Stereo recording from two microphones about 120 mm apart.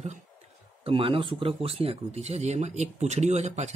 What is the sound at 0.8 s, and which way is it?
Speech, 50° right (ahead or behind).